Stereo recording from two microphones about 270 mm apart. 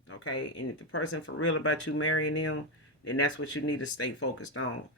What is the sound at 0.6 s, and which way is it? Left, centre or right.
Speech, left.